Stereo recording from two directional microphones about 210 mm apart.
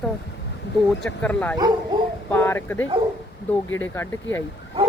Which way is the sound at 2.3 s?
10° left (ahead or behind).